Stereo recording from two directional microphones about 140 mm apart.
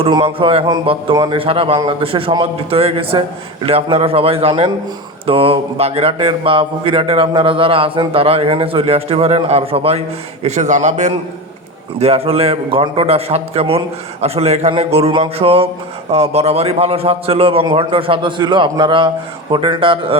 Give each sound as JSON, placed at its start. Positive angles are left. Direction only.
{"t": 0.0, "sound": "a man's voice", "side_deg": -35}
{"t": 11.9, "sound": "a man's voice", "side_deg": -45}